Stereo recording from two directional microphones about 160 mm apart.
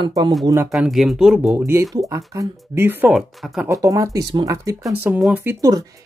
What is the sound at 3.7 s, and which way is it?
Speech, 20° right (ahead or behind).